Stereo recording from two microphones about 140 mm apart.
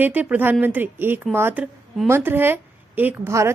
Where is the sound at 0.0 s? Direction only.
10° right (ahead or behind).